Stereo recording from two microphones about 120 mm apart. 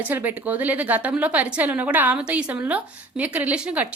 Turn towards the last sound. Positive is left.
turn(degrees=-10)  # may be behind; listen again after turning